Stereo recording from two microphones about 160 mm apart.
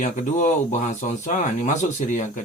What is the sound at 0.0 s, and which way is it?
Speech, 50° left (ahead or behind).